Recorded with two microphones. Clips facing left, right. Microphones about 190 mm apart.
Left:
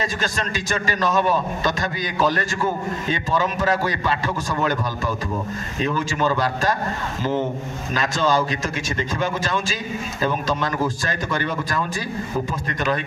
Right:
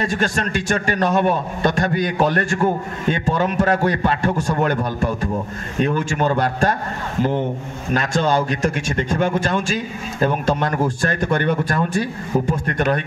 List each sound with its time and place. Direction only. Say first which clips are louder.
0.1 s a man's voice: right 5 dB; 65° right (ahead or behind)
5.8 s a man's voice: right 4 dB; 60° right (ahead or behind)
7.9 s a man's voice: right 2 dB; 60° right (ahead or behind)